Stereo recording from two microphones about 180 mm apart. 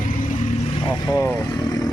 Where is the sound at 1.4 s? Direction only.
25° left (ahead or behind).